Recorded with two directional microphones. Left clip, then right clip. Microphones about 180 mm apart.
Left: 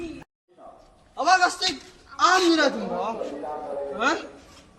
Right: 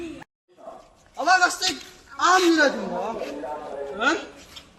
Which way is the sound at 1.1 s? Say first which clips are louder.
Right 1 dB; 5° left (ahead or behind).